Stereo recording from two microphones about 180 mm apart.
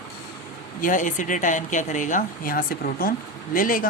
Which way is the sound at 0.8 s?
45° left (ahead or behind).